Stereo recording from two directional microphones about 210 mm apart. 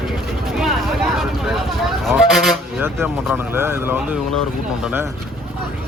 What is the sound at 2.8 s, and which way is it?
Speech, 10° right (ahead or behind).